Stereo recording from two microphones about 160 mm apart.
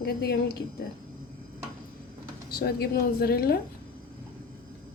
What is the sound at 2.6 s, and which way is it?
A woman's voice, 75° left (ahead or behind).